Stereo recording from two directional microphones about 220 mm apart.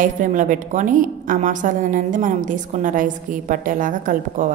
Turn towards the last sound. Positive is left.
turn(degrees=-35)  # may be behind; listen again after turning